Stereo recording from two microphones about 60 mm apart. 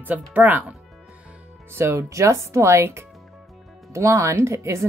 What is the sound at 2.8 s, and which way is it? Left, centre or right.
Speech, right.